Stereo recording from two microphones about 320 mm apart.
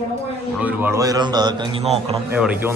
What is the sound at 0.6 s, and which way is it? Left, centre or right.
Speech, centre.